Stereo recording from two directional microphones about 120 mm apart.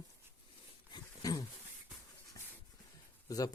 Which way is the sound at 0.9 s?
35° left (ahead or behind).